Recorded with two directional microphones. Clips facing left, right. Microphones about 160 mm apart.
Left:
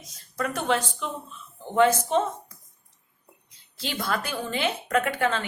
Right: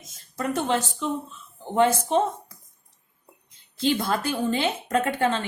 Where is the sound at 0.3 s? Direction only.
25° right (ahead or behind).